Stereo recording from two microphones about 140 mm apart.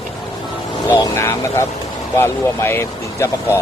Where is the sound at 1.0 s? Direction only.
20° left (ahead or behind).